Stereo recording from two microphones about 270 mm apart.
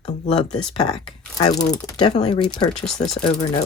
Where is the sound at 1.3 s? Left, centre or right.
Centre.